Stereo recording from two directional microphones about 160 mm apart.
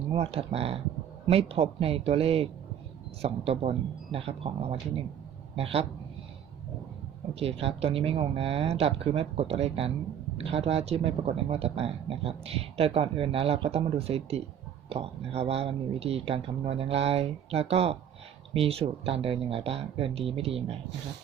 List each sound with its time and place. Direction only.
0.1 s speech: 40° right (ahead or behind)
7.3 s speech: 40° right (ahead or behind)